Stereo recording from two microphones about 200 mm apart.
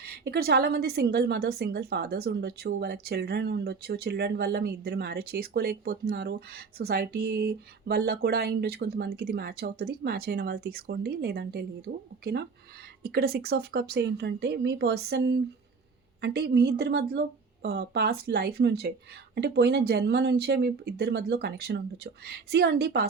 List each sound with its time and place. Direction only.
0.0 s a woman's voice: 50° right (ahead or behind)